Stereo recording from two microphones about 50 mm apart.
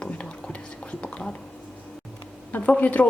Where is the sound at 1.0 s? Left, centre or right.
Left.